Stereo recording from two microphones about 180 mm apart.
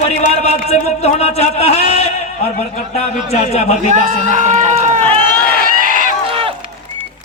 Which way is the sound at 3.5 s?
35° left (ahead or behind).